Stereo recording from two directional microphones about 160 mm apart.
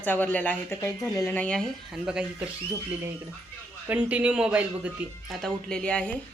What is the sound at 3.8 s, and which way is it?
Speech, 10° right (ahead or behind).